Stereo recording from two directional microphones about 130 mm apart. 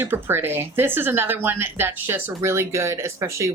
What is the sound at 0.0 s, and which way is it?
Speech, 15° right (ahead or behind).